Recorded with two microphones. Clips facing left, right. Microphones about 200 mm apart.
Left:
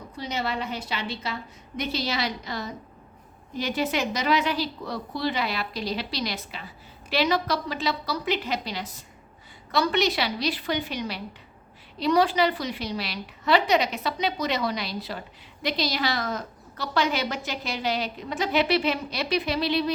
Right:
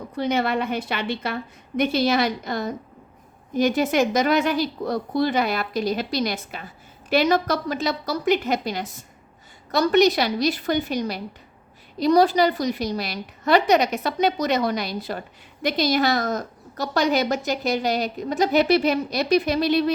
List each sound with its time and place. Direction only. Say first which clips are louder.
0.2 s a woman's voice: right 7 dB; 55° right (ahead or behind)